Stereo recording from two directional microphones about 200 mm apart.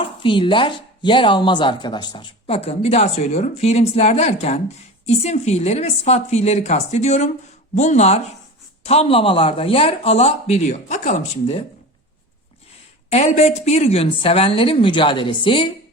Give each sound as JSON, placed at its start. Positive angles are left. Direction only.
{"t": 0.2, "sound": "speech", "side_deg": 25}
{"t": 13.1, "sound": "speech", "side_deg": 30}